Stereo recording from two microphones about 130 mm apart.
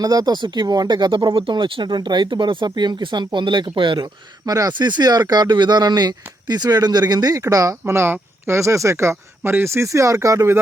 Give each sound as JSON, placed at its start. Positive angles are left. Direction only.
{"t": 0.0, "sound": "speech", "side_deg": -30}